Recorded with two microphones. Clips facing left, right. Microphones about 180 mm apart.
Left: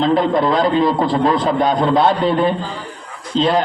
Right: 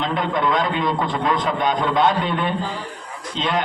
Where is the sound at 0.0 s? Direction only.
35° left (ahead or behind).